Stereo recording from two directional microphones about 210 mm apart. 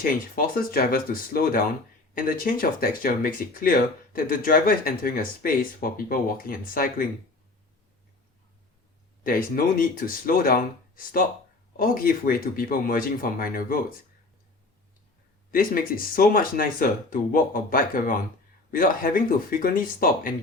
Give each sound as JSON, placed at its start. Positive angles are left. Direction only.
{"t": 0.0, "sound": "speech", "side_deg": 40}
{"t": 9.2, "sound": "speech", "side_deg": 40}
{"t": 11.8, "sound": "speech", "side_deg": 45}
{"t": 15.5, "sound": "speech", "side_deg": 45}